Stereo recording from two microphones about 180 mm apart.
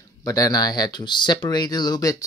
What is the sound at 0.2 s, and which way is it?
Speech, 20° left (ahead or behind).